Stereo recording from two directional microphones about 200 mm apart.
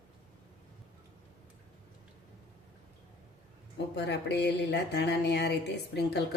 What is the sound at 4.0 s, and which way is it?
Speech, 55° left (ahead or behind).